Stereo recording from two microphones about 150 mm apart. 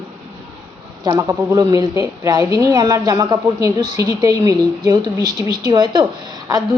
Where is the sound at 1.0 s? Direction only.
25° right (ahead or behind).